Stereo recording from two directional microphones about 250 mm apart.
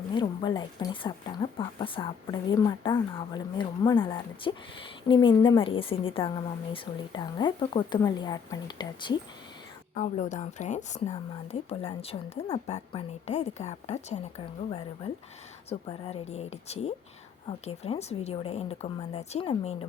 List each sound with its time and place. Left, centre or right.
0.1 s speech: centre
9.9 s speech: left